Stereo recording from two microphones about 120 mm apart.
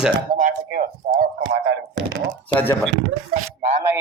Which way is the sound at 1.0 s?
75° right (ahead or behind).